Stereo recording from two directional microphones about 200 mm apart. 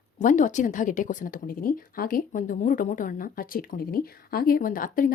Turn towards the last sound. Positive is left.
turn(degrees=40)  # may be behind; listen again after turning